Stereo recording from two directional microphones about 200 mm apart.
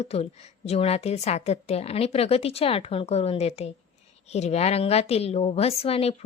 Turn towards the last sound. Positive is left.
turn(degrees=30)  # may be behind; listen again after turning